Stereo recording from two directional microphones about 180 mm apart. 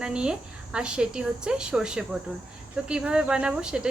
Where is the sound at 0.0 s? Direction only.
5° right (ahead or behind).